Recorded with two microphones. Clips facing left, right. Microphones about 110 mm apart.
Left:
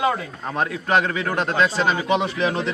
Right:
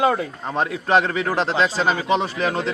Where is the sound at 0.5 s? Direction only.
25° right (ahead or behind).